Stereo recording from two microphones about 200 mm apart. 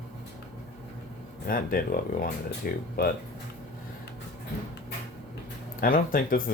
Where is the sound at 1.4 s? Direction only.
45° left (ahead or behind).